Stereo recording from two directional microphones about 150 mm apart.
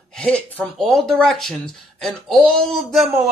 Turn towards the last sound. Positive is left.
turn(degrees=0)  # may be behind; listen again after turning